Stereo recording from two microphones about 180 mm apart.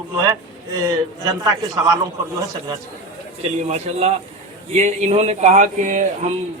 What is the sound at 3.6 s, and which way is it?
Speech, 35° right (ahead or behind).